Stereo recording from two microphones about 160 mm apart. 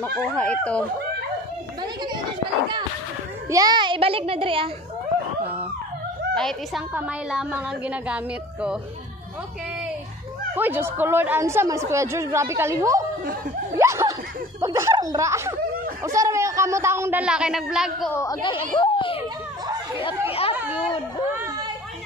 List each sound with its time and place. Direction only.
0.4 s speech: 5° left (ahead or behind)
3.4 s a child's voice: 20° right (ahead or behind)
6.3 s a woman's voice: centre (ahead or behind)
6.9 s speech: 10° right (ahead or behind)
10.5 s speech: 10° right (ahead or behind)
13.7 s snicker: 15° right (ahead or behind)
14.6 s speech: 20° right (ahead or behind)
17.2 s speech: 5° right (ahead or behind)
18.1 s speech: 20° left (ahead or behind)
20.2 s chatter: 40° left (ahead or behind)
20.7 s speech: 35° left (ahead or behind)